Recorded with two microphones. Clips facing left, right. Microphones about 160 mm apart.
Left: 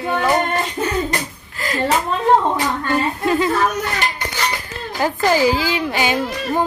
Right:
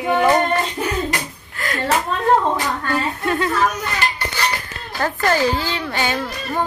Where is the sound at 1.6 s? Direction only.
Centre (ahead or behind).